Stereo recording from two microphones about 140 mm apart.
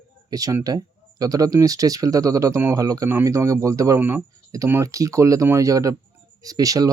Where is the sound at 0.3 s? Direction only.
25° right (ahead or behind).